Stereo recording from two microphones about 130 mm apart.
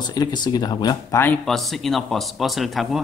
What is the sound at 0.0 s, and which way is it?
Speech, 30° left (ahead or behind).